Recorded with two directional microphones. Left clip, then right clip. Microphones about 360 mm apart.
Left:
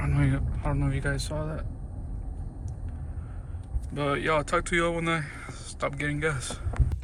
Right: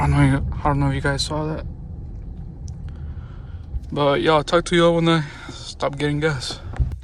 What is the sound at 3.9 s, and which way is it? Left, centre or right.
Speech, centre.